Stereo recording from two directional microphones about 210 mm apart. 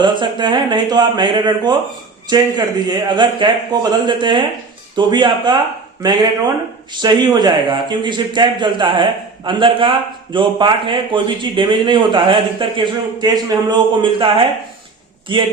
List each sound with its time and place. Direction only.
0.0 s a man's voice: 20° right (ahead or behind)